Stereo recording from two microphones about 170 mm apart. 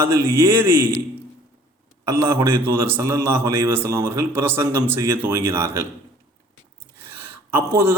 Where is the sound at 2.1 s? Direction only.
15° right (ahead or behind).